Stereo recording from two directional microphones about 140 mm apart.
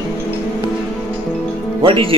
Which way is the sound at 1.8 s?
40° right (ahead or behind).